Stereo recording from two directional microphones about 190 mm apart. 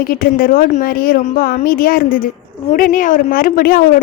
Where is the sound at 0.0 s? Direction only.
50° left (ahead or behind).